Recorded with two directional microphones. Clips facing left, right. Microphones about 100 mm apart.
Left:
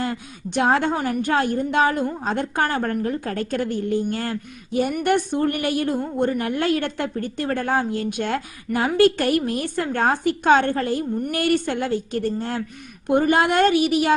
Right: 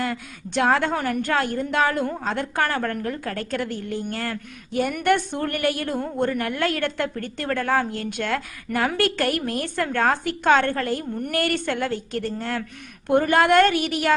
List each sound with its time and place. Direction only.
0.0 s a woman's voice: 25° left (ahead or behind)